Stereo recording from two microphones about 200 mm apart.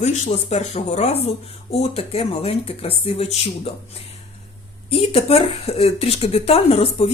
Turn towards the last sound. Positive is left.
turn(degrees=30)  # may be behind; listen again after turning